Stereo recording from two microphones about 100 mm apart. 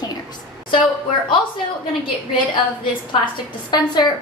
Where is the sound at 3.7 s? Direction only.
45° left (ahead or behind).